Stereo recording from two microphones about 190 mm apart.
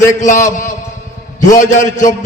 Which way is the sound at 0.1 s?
40° left (ahead or behind).